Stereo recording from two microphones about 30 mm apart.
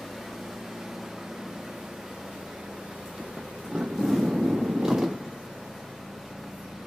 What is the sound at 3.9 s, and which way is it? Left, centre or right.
Vehicle, centre.